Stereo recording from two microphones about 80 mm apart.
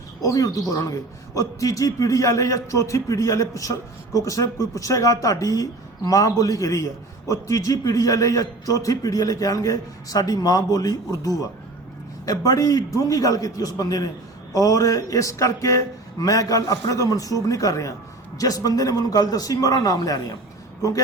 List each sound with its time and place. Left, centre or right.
0.2 s a man's voice: left